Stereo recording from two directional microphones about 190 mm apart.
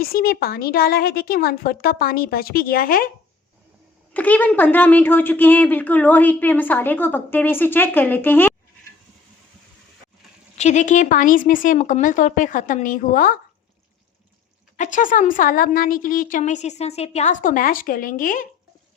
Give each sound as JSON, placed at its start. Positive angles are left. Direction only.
{"t": 0.0, "sound": "a woman's voice", "side_deg": 50}
{"t": 4.1, "sound": "speech", "side_deg": 10}
{"t": 10.6, "sound": "a woman's voice", "side_deg": 40}
{"t": 14.8, "sound": "a woman's voice", "side_deg": 40}